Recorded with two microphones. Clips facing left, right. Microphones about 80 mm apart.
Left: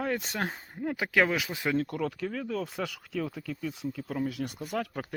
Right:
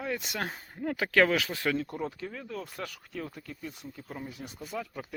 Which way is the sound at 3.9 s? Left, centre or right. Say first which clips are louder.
Left 9 dB; left.